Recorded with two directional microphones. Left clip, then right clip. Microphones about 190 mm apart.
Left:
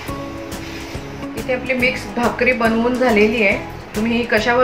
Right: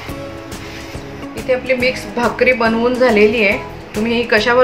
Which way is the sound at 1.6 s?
20° right (ahead or behind).